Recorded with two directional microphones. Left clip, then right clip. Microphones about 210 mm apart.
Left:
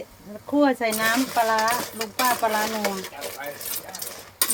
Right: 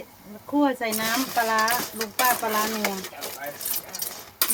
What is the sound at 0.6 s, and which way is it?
Speech, 35° left (ahead or behind).